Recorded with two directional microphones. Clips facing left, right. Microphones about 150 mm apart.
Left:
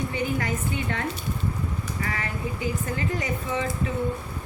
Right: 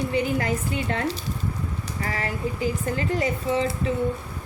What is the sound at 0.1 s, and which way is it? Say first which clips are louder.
Speech: right 3 dB; 35° right (ahead or behind).